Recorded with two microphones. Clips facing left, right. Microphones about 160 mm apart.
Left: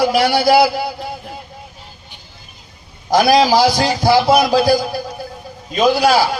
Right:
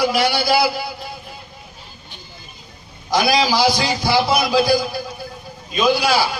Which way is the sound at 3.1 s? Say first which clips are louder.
Left 6 dB; 50° left (ahead or behind).